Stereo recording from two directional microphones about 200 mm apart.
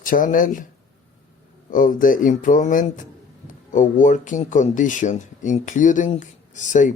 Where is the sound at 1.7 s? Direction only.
40° left (ahead or behind).